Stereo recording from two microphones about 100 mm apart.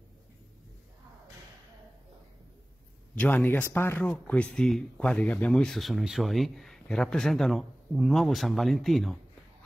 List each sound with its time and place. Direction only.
3.2 s speech: 15° left (ahead or behind)